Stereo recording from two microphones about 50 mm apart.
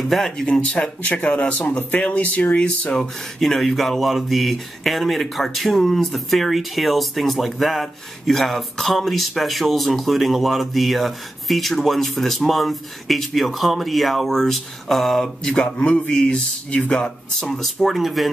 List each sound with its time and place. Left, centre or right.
0.0 s speech: centre
1.0 s speech: left
3.0 s speech: centre
15.4 s speech: centre
17.4 s speech: centre